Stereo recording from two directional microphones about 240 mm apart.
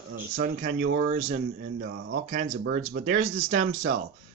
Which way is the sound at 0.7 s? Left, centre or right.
Right.